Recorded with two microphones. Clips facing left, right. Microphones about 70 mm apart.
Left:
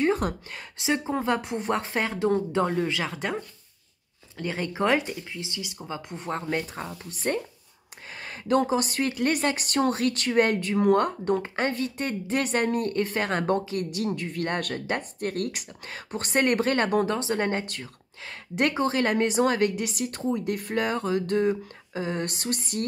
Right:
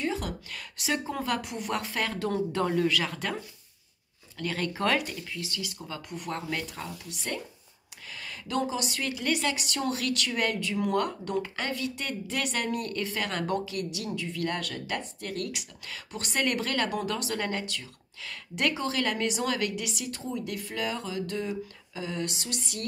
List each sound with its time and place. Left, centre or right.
0.0 s a sound: left
0.5 s speech: left
4.4 s speech: left